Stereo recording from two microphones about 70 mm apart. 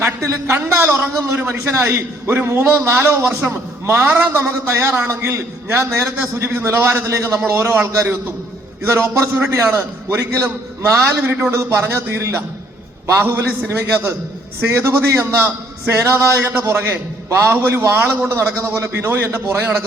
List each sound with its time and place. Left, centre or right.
0.2 s a man's voice: right
8.8 s a man's voice: right